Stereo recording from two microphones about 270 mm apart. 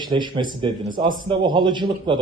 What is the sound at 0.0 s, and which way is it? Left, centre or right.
Speech, centre.